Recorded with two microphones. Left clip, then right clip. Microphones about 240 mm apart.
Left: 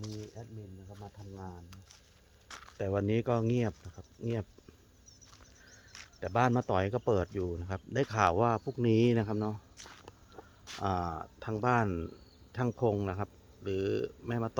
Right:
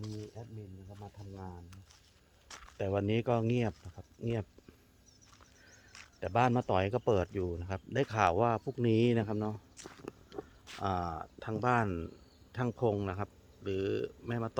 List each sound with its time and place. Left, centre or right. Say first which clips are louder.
0.0 s bird: left 1 dB; centre
1.0 s speech: left 1 dB; right
2.5 s a sound: left 2 dB; centre
2.7 s speech: left 1 dB; centre
5.9 s speech: even; centre